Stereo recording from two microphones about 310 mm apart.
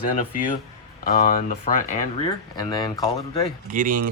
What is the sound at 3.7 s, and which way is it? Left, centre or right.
Speech, right.